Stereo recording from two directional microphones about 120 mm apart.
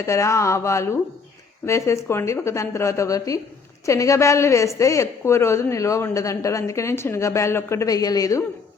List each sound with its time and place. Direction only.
0.0 s a woman's voice: 25° left (ahead or behind)